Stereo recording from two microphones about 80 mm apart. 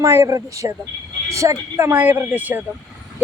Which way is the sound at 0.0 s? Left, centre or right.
Right.